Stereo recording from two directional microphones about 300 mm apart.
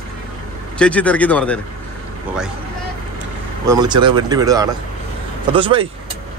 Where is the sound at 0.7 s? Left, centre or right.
Centre.